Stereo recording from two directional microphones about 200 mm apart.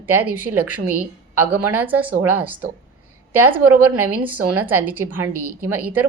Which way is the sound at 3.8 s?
90° right.